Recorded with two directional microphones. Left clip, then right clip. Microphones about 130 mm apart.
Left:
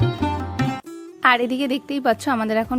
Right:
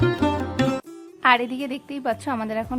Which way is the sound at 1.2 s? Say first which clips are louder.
Left 2 dB; 35° left (ahead or behind).